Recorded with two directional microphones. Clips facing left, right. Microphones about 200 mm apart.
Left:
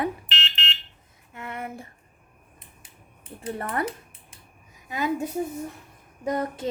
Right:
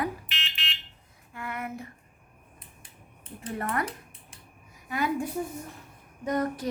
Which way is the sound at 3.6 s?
30° left (ahead or behind).